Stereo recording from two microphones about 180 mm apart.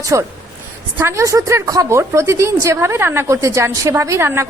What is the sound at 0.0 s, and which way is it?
A woman's voice, 15° right (ahead or behind).